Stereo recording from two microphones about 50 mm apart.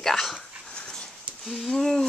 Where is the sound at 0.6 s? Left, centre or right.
Centre.